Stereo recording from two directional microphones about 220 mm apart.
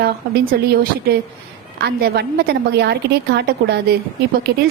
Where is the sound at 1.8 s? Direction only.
45° right (ahead or behind).